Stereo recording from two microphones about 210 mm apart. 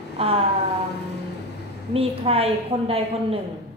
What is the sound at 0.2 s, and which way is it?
Speech, 25° right (ahead or behind).